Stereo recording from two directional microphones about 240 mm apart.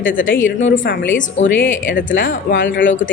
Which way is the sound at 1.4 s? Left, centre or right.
Left.